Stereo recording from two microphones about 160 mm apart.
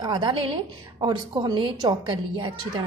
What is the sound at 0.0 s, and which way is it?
A woman's voice, 30° right (ahead or behind).